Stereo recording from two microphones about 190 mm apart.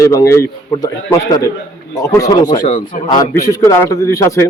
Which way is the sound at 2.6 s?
45° left (ahead or behind).